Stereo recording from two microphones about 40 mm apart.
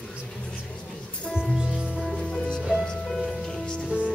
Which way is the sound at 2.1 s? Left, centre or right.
Left.